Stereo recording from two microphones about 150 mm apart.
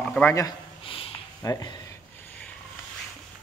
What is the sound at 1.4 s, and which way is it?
Speech, 25° left (ahead or behind).